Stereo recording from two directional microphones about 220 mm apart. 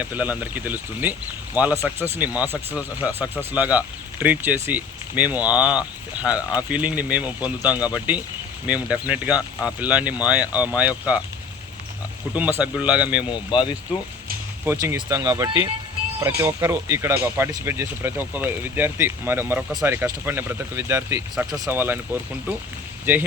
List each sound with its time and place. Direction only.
0.0 s speech: 5° right (ahead or behind)
12.3 s speech: 5° right (ahead or behind)
13.3 s speech: 20° left (ahead or behind)
14.6 s speech: 10° right (ahead or behind)